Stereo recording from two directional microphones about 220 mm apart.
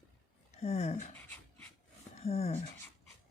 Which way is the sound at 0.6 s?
30° left (ahead or behind).